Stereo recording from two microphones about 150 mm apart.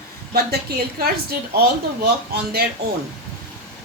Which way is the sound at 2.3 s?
90° right.